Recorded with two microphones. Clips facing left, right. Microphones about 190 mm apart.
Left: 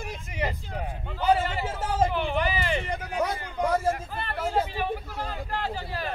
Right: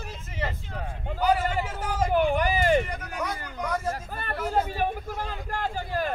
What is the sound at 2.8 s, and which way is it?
Speech, 30° left (ahead or behind).